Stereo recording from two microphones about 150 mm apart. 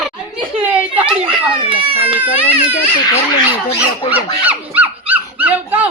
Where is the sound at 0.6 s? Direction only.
10° right (ahead or behind).